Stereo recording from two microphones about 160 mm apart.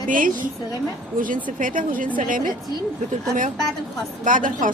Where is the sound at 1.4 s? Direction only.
55° right (ahead or behind).